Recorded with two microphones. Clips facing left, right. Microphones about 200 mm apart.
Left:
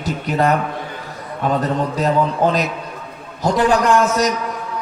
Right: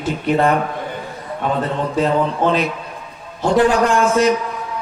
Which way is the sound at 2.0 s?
40° left (ahead or behind).